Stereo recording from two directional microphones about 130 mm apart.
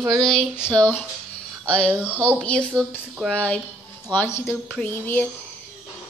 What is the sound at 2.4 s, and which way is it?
Speech, 10° left (ahead or behind).